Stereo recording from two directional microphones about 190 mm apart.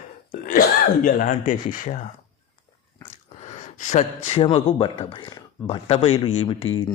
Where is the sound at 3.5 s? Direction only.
40° left (ahead or behind).